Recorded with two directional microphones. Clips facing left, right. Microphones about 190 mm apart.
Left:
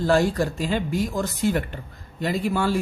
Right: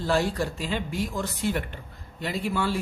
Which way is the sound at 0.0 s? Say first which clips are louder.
Left 5 dB; 45° left (ahead or behind).